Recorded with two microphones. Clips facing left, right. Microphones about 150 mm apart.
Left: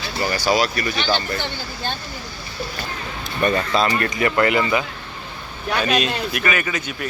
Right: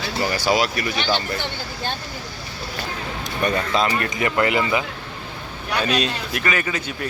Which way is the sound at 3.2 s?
15° right (ahead or behind).